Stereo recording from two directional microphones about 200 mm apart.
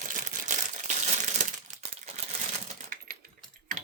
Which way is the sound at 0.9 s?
35° right (ahead or behind).